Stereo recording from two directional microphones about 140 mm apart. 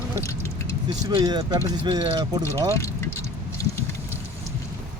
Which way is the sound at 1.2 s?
30° right (ahead or behind).